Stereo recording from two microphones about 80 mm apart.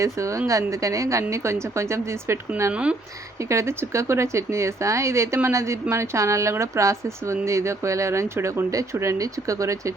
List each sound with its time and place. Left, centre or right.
0.0 s speech: right
3.5 s speech: right